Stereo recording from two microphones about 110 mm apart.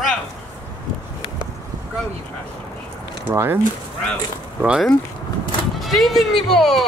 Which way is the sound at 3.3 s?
20° right (ahead or behind).